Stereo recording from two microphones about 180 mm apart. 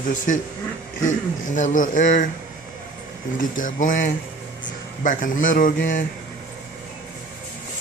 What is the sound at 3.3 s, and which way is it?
Speech, 45° left (ahead or behind).